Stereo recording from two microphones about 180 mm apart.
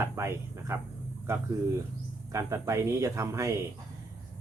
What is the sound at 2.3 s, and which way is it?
Speech, 15° right (ahead or behind).